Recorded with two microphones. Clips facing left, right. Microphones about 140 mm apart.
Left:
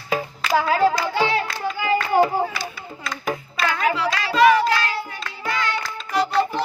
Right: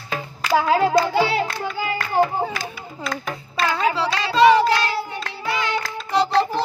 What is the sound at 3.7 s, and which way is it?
Hands, 30° right (ahead or behind).